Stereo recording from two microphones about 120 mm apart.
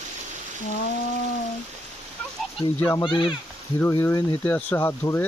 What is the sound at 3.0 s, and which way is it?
Speech, 40° left (ahead or behind).